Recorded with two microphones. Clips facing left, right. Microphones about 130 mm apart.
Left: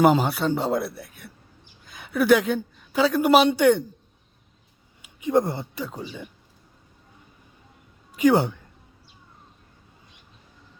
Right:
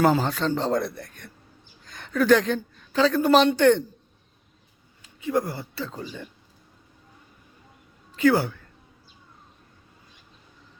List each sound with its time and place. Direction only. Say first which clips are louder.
0.0 s a woman's voice: left 2 dB; 15° left (ahead or behind)
5.0 s speech: left 4 dB; 20° left (ahead or behind)
8.1 s speech: left 2 dB; 20° left (ahead or behind)